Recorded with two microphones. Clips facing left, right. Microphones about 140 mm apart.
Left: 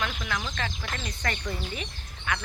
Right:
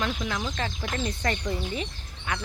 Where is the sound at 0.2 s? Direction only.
25° right (ahead or behind).